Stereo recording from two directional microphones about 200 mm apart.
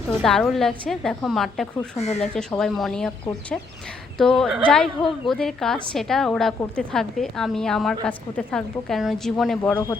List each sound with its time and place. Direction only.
0.2 s a woman's voice: centre (ahead or behind)
2.0 s speech: 30° left (ahead or behind)
2.2 s a woman's voice: 5° left (ahead or behind)
4.2 s a woman's voice: centre (ahead or behind)